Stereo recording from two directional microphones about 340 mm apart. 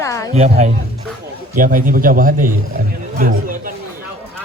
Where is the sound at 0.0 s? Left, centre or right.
Centre.